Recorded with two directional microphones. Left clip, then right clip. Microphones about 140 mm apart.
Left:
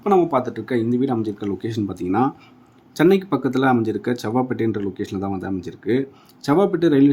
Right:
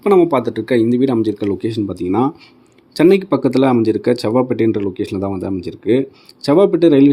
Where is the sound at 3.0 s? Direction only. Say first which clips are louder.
Right 5 dB; 40° right (ahead or behind).